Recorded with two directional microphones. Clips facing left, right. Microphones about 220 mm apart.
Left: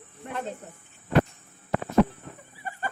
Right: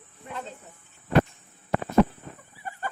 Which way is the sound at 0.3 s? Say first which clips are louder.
Left 4 dB; 55° left (ahead or behind).